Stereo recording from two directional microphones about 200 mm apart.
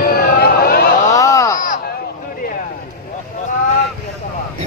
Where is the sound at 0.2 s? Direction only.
50° left (ahead or behind).